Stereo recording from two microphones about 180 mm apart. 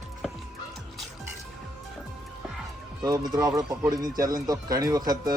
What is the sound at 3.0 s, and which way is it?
Speech, 20° right (ahead or behind).